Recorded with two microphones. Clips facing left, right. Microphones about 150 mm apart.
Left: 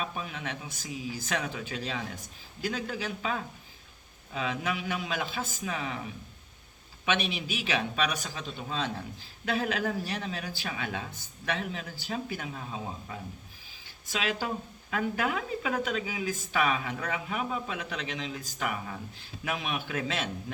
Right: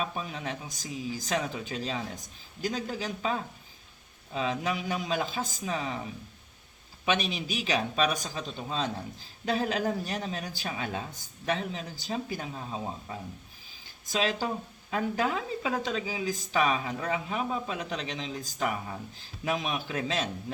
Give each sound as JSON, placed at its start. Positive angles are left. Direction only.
{"t": 0.0, "sound": "speech", "side_deg": -35}
{"t": 4.4, "sound": "speech", "side_deg": -35}
{"t": 7.0, "sound": "speech", "side_deg": -40}